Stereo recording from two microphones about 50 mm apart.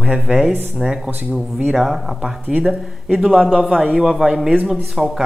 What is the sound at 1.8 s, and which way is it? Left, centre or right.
A man's voice, centre.